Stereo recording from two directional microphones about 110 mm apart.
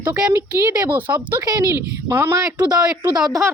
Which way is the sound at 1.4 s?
30° right (ahead or behind).